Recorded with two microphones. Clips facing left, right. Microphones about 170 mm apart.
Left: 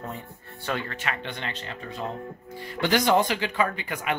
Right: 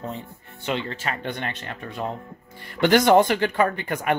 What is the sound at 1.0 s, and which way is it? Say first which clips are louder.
Speech: right 3 dB; 50° right (ahead or behind).